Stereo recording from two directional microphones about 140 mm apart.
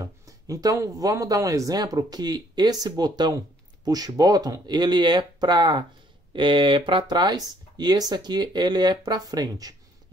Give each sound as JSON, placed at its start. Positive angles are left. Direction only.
{"t": 0.0, "sound": "speech", "side_deg": -25}